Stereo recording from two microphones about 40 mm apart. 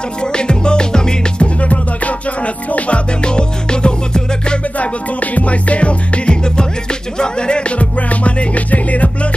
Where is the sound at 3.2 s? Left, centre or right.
Left.